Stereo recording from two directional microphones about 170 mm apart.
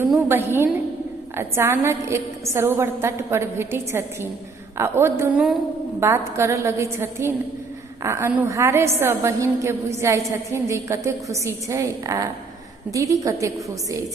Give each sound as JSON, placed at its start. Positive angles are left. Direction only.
{"t": 0.3, "sound": "a woman's voice", "side_deg": -15}